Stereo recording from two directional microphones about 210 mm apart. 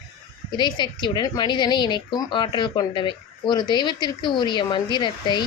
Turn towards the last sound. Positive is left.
turn(degrees=20)  # may be behind; listen again after turning